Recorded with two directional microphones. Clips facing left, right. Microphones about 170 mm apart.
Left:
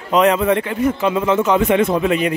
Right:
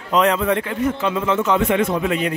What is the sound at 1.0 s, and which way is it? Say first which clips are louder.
A man's voice: left 5 dB; 15° left (ahead or behind).